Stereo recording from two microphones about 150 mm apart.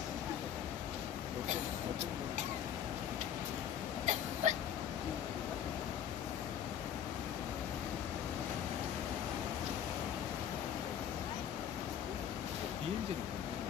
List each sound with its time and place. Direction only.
4.4 s hiccup: 50° right (ahead or behind)